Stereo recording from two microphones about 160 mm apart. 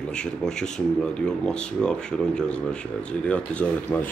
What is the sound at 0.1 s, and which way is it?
Speech, 5° left (ahead or behind).